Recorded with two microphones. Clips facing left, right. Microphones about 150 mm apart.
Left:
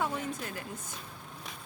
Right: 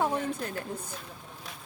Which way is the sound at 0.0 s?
40° right (ahead or behind).